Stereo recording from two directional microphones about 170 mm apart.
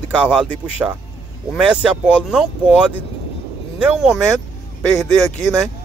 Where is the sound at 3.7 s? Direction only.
5° right (ahead or behind).